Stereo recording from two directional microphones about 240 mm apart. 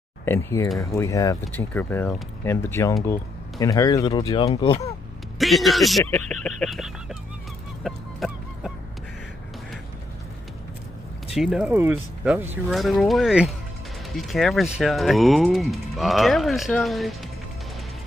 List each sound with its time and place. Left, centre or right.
0.2 s speech: centre
5.4 s speech: centre
7.8 s music: centre
11.3 s speech: centre